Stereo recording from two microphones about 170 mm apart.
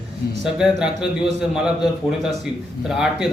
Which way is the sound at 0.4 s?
5° right (ahead or behind).